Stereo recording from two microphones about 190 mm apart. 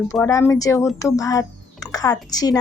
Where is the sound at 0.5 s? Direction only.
15° left (ahead or behind).